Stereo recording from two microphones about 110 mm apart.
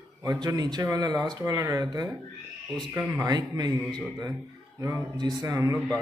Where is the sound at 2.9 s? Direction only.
25° right (ahead or behind).